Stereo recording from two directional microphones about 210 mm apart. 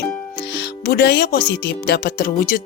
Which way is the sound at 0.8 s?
45° left (ahead or behind).